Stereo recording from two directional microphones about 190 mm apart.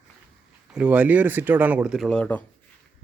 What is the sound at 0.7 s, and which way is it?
Speech, 5° right (ahead or behind).